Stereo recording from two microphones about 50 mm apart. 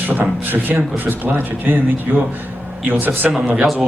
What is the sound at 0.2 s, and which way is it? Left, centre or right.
Speech, right.